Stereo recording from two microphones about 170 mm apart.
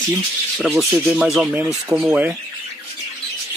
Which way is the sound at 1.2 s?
5° right (ahead or behind).